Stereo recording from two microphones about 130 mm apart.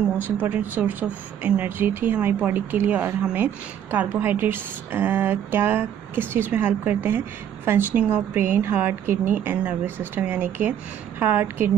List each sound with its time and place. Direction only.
0.4 s a woman's voice: 15° right (ahead or behind)